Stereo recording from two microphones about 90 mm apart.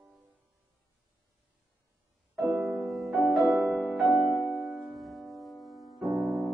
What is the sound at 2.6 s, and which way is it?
Music, centre (ahead or behind).